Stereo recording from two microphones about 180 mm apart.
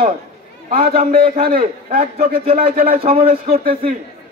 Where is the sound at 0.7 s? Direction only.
50° right (ahead or behind).